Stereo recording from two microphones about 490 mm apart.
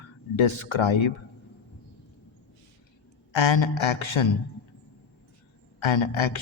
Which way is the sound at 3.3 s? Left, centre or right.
Left.